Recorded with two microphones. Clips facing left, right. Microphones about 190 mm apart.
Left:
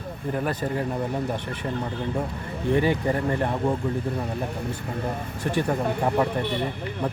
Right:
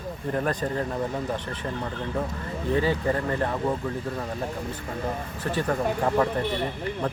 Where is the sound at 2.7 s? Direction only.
15° left (ahead or behind).